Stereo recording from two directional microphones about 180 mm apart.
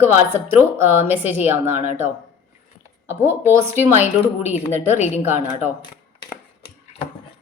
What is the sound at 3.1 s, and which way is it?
Speech, 15° right (ahead or behind).